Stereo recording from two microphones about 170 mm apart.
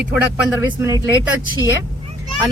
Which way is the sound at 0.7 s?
20° right (ahead or behind).